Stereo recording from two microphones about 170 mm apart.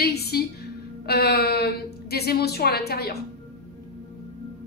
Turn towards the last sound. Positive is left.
turn(degrees=70)  # may be behind; listen again after turning